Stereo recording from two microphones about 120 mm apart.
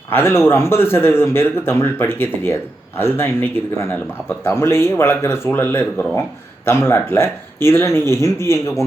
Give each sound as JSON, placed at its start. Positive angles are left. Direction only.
{"t": 0.1, "sound": "speech", "side_deg": 20}